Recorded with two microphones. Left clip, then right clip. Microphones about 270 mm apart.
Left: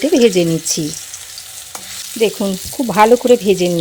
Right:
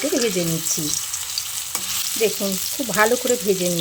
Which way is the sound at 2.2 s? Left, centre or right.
Left.